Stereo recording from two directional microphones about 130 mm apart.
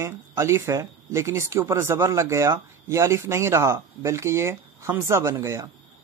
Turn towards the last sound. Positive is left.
turn(degrees=-25)  # may be behind; listen again after turning